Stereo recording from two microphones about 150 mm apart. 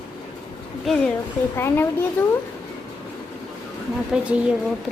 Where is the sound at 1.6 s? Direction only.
15° left (ahead or behind).